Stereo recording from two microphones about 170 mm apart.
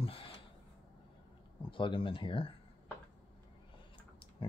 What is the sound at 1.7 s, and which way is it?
Speech, 30° left (ahead or behind).